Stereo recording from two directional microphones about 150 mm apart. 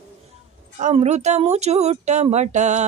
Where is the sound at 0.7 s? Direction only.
50° right (ahead or behind).